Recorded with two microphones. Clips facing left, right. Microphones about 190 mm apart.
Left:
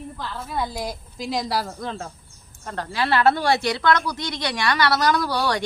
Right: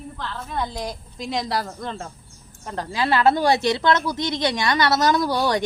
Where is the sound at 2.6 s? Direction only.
15° right (ahead or behind).